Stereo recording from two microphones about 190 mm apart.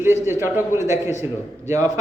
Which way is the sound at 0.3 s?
10° right (ahead or behind).